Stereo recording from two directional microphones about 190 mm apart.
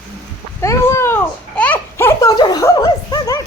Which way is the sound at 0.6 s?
15° left (ahead or behind).